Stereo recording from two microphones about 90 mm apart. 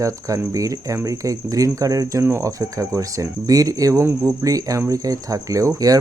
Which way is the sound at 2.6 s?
40° right (ahead or behind).